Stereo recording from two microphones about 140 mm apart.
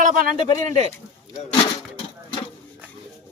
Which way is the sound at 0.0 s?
65° right (ahead or behind).